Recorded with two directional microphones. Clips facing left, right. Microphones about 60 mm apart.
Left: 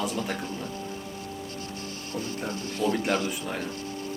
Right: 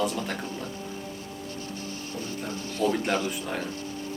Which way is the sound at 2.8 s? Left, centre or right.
Right.